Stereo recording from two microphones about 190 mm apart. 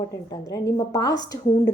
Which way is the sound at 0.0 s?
20° left (ahead or behind).